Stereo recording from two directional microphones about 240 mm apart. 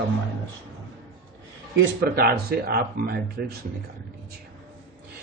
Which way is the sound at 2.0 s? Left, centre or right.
Right.